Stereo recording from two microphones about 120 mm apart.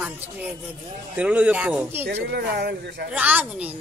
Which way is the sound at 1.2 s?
10° right (ahead or behind).